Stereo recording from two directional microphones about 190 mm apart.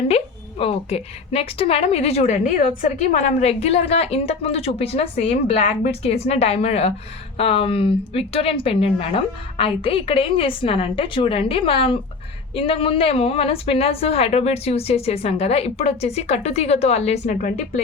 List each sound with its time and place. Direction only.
0.6 s a woman's voice: 30° left (ahead or behind)